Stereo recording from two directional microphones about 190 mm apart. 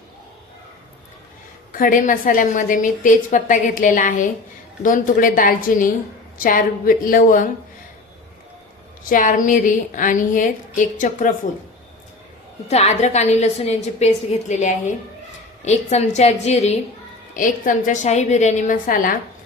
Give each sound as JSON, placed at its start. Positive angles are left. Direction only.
{"t": 1.7, "sound": "a woman's voice", "side_deg": 45}
{"t": 9.0, "sound": "a woman's voice", "side_deg": 45}
{"t": 12.6, "sound": "a woman's voice", "side_deg": 35}